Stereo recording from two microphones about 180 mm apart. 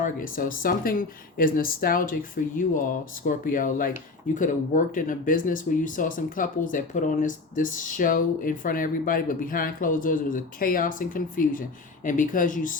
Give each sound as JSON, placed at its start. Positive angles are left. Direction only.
{"t": 0.0, "sound": "speech", "side_deg": 50}